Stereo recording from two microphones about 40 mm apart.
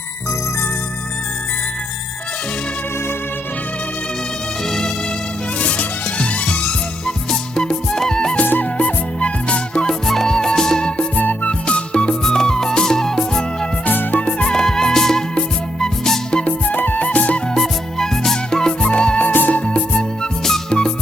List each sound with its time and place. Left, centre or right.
5.5 s music: left
7.3 s music: centre
8.8 s music: left
10.1 s music: centre
11.1 s music: left
12.2 s music: centre
13.8 s music: left
14.2 s music: left
14.5 s music: centre
16.3 s music: left
16.6 s music: left
17.6 s music: centre
18.9 s music: left
20.4 s music: centre